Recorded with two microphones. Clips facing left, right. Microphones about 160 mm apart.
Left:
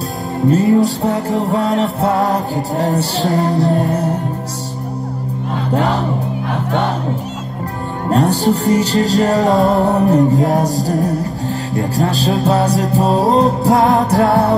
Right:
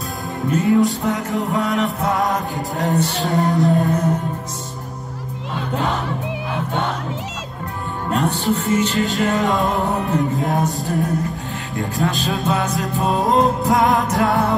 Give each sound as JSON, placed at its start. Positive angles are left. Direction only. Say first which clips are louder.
{"t": 0.5, "sound": "music", "louder": "left 4 dB", "side_deg": 35}
{"t": 8.1, "sound": "music", "louder": "left 6 dB", "side_deg": 35}